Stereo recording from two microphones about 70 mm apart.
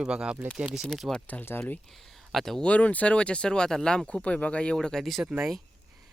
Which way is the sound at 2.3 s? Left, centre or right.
Centre.